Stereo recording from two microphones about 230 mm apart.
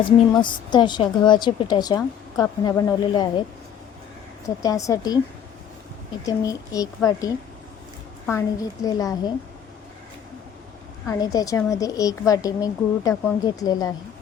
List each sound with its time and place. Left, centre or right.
0.0 s a woman's voice: centre
4.4 s a woman's voice: centre
6.2 s a woman's voice: centre
11.0 s a woman's voice: centre